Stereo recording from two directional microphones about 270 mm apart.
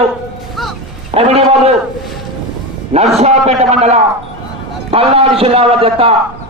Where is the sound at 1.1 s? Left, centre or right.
Right.